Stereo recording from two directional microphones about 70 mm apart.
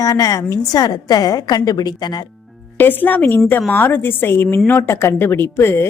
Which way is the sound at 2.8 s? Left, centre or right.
Left.